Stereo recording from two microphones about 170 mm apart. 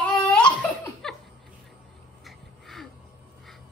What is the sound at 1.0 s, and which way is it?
Laughter, centre (ahead or behind).